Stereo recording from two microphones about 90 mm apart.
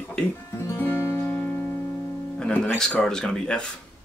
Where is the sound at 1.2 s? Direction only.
20° left (ahead or behind).